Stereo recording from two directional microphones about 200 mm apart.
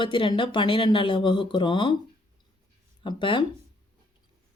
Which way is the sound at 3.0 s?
25° left (ahead or behind).